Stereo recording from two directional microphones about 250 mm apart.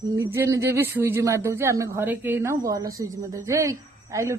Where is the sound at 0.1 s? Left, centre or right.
Centre.